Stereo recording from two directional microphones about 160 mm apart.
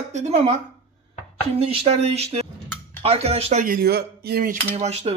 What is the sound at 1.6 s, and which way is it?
Speech, 35° right (ahead or behind).